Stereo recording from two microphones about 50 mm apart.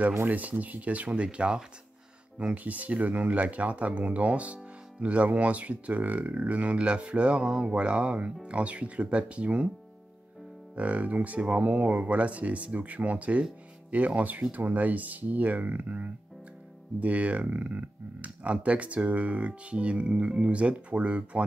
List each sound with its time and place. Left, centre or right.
0.3 s speech: right
10.8 s speech: right